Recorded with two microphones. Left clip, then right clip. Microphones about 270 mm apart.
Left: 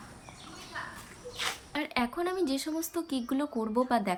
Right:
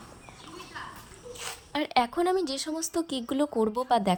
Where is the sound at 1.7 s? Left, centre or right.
Right.